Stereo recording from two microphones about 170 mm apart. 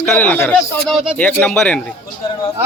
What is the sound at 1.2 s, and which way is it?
Speech, 10° left (ahead or behind).